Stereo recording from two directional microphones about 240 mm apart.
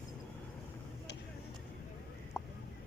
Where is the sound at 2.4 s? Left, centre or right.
Centre.